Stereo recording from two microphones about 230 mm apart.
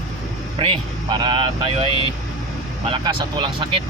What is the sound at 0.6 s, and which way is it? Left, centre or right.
Speech, right.